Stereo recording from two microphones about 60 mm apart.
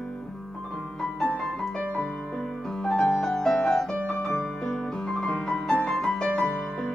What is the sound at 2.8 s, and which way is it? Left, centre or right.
Piano, centre.